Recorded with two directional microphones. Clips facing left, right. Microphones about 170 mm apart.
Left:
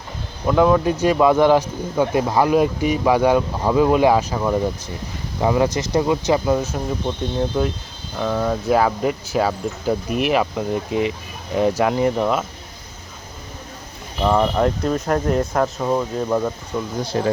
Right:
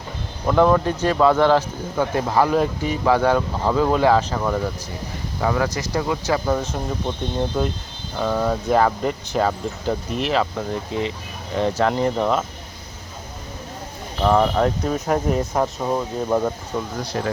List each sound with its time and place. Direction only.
0.4 s speech: 5° left (ahead or behind)
14.2 s speech: centre (ahead or behind)
17.0 s speech: 25° left (ahead or behind)